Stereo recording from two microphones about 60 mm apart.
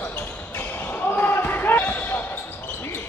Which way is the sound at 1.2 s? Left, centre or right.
Left.